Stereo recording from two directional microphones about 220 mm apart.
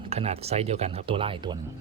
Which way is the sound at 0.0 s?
25° right (ahead or behind).